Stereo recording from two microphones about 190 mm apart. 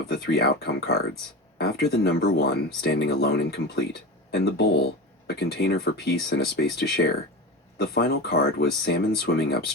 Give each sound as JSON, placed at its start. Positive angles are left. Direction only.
{"t": 0.1, "sound": "speech", "side_deg": 55}